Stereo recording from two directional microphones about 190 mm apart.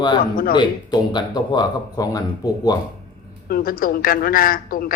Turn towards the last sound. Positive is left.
turn(degrees=50)  # may be behind; listen again after turning